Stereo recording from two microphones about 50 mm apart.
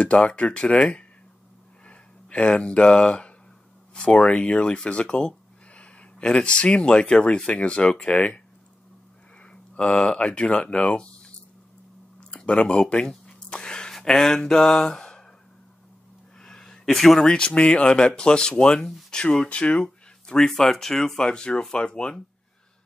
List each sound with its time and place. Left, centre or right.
0.0 s speech: centre
9.4 s speech: left
13.3 s a sound: centre
13.9 s speech: centre
16.3 s speech: centre
21.3 s speech: left